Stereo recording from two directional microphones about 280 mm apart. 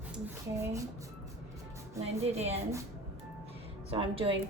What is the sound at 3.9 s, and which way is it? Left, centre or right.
Speech, centre.